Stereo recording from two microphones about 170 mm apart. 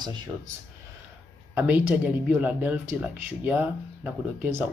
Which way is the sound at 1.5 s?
10° right (ahead or behind).